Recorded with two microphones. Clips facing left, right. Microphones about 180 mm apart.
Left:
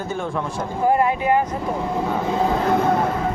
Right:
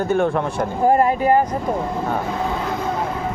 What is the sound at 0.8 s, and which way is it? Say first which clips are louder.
Speech: right 2 dB; 40° right (ahead or behind).